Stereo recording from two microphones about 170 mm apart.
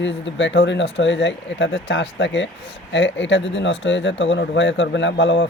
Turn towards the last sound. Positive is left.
turn(degrees=90)